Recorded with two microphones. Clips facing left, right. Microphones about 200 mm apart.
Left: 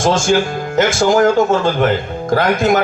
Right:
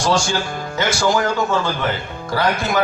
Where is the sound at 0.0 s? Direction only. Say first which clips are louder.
Left 6 dB; 50° left (ahead or behind).